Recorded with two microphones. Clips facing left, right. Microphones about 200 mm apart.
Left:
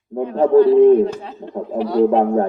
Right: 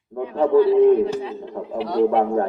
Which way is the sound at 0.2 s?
45° left (ahead or behind).